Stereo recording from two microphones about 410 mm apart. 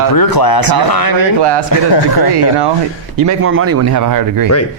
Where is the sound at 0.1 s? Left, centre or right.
Left.